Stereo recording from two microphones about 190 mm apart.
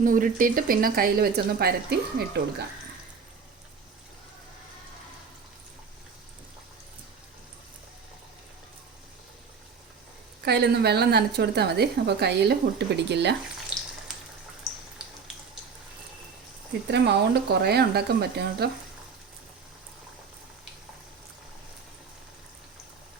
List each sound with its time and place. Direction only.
0.0 s speech: 45° right (ahead or behind)
10.4 s a woman's voice: 60° right (ahead or behind)
14.7 s a sound: centre (ahead or behind)
16.9 s a woman's voice: 60° right (ahead or behind)